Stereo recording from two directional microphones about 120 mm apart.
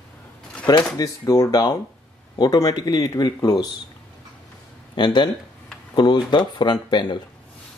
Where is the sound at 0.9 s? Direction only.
30° left (ahead or behind).